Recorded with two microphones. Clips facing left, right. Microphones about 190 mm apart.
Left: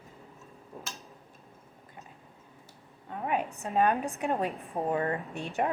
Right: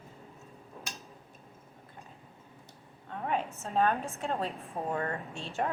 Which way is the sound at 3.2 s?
10° left (ahead or behind).